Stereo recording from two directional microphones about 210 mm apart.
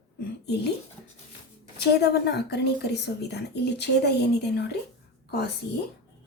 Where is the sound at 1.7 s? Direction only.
50° left (ahead or behind).